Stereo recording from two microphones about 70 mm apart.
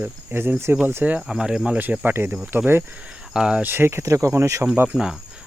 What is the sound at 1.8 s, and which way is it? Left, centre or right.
Speech, right.